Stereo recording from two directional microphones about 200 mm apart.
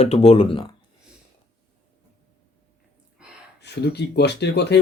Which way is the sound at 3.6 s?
55° left (ahead or behind).